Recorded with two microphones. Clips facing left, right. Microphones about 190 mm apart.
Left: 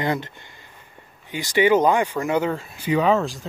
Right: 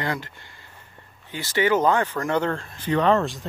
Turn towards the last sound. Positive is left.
turn(degrees=0)  # may be behind; listen again after turning